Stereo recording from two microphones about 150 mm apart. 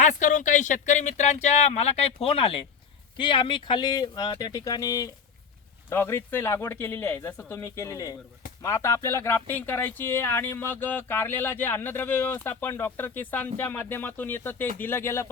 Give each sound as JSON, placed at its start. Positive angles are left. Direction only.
{"t": 0.0, "sound": "speech", "side_deg": 55}